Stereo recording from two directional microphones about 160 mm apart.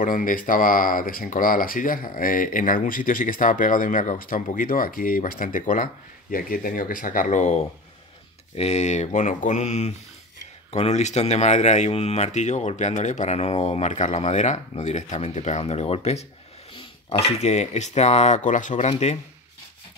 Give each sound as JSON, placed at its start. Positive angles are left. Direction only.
{"t": 0.0, "sound": "speech", "side_deg": 55}